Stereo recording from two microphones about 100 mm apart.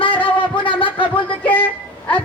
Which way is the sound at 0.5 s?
55° left (ahead or behind).